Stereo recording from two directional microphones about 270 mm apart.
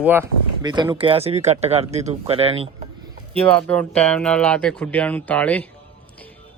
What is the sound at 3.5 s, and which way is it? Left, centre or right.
A man's voice, centre.